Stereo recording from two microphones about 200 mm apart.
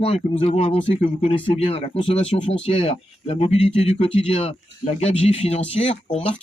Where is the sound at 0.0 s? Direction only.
30° left (ahead or behind).